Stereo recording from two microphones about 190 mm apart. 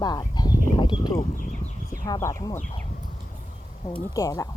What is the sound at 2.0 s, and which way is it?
Speech, 15° left (ahead or behind).